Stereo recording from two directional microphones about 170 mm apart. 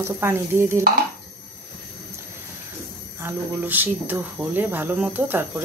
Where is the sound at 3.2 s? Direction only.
10° right (ahead or behind).